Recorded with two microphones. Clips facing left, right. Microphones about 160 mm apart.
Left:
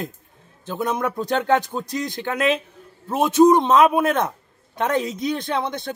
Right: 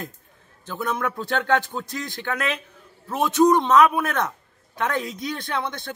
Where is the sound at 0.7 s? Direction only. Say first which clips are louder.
Left 3 dB; 20° left (ahead or behind).